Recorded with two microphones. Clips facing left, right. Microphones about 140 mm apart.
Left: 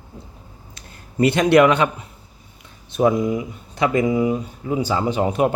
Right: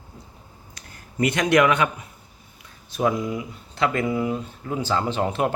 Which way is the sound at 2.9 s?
25° left (ahead or behind).